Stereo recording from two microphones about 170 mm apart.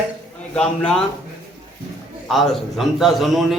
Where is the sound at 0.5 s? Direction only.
5° left (ahead or behind).